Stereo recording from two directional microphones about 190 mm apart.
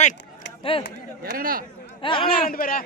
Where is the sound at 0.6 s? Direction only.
30° left (ahead or behind).